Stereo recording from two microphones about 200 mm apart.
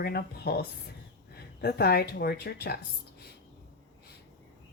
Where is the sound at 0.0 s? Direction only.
50° left (ahead or behind).